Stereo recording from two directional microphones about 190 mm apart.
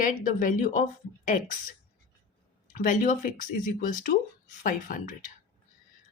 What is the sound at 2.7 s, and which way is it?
Speech, 45° left (ahead or behind).